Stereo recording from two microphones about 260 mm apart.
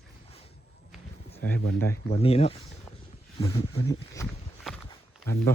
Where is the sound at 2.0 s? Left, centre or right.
Left.